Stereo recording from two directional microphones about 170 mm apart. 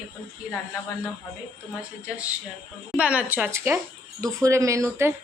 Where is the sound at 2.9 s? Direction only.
5° right (ahead or behind).